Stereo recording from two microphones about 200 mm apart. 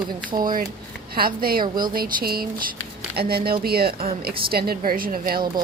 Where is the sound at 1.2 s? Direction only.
50° right (ahead or behind).